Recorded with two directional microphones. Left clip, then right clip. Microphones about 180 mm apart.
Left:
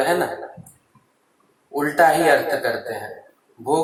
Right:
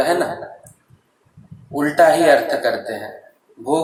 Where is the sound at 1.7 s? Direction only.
25° right (ahead or behind).